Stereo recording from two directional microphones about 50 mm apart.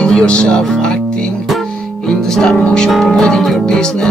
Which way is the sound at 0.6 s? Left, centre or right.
Centre.